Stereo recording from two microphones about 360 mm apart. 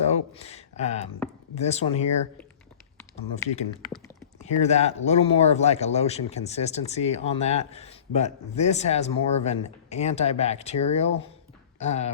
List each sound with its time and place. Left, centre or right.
0.3 s speech: centre
3.2 s speech: centre